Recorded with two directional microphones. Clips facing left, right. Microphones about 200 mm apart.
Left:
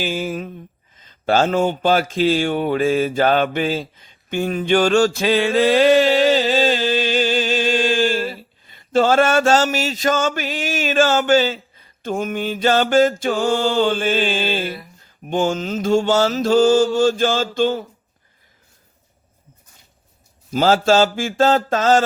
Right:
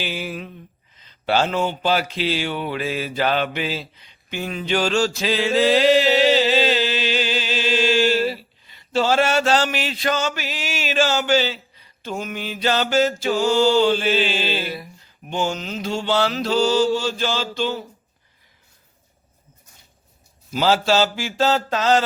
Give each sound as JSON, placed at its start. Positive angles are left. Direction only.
{"t": 0.0, "sound": "mantra", "side_deg": 45}
{"t": 0.9, "sound": "speech", "side_deg": 45}
{"t": 15.3, "sound": "mantra", "side_deg": 50}
{"t": 20.5, "sound": "mantra", "side_deg": 45}